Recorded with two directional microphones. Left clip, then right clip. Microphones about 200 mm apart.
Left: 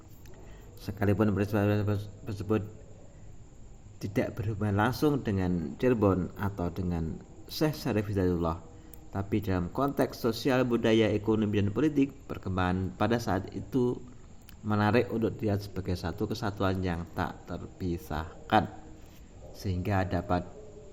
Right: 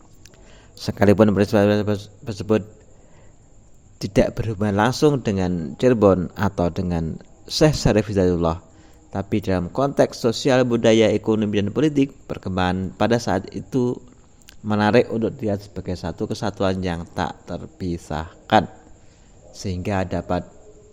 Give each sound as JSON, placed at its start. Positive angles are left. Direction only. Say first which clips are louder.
{"t": 0.8, "sound": "a man's voice", "louder": "right 13 dB", "side_deg": -45}
{"t": 3.9, "sound": "a man's voice", "louder": "right 13 dB", "side_deg": -45}